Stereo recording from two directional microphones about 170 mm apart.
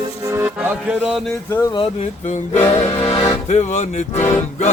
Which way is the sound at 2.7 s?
40° left (ahead or behind).